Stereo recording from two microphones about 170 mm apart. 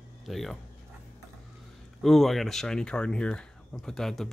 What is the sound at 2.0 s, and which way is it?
Speech, centre (ahead or behind).